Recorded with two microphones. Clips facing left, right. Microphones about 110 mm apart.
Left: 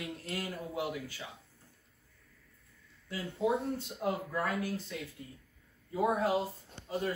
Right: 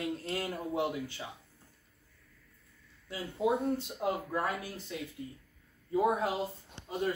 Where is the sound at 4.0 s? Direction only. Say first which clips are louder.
Left 2 dB; 20° right (ahead or behind).